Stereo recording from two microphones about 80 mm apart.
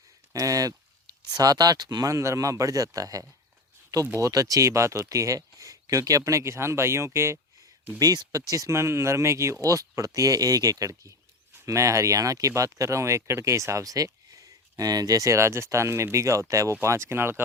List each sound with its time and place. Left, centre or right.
0.3 s speech: right
2.0 s speech: right
7.9 s speech: right